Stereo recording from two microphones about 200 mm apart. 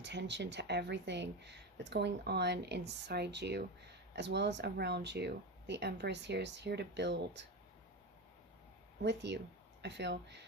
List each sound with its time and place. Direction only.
0.0 s speech: 60° right (ahead or behind)
9.0 s speech: 60° right (ahead or behind)